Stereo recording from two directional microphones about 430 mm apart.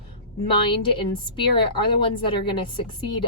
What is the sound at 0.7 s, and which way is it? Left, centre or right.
A woman's voice, centre.